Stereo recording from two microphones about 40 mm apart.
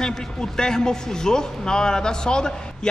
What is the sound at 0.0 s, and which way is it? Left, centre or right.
A man's voice, centre.